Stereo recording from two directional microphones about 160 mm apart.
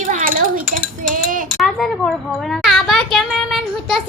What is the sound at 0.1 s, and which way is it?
Cutlery, 55° right (ahead or behind).